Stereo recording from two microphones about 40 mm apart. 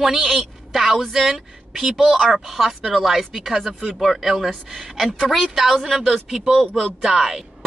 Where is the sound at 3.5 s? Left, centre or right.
Centre.